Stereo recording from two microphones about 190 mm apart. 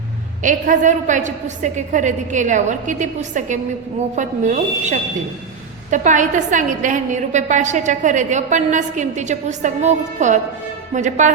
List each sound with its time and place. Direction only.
0.4 s a woman's voice: 45° right (ahead or behind)